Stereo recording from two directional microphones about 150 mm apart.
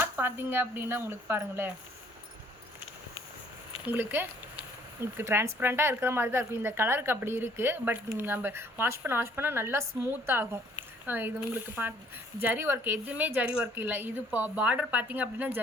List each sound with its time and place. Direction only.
0.0 s speech: 15° right (ahead or behind)
3.8 s speech: 15° right (ahead or behind)